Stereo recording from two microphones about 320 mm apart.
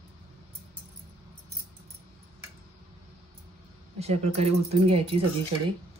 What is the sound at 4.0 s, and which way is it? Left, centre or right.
Speech, centre.